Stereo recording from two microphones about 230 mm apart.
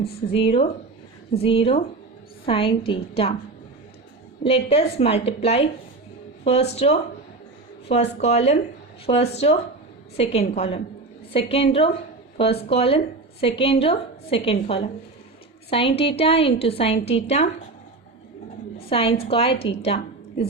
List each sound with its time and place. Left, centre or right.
0.3 s a woman's voice: left
4.4 s a woman's voice: left
18.9 s a woman's voice: left